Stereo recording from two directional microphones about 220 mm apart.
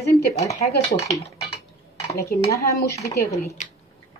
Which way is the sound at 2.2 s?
45° left (ahead or behind).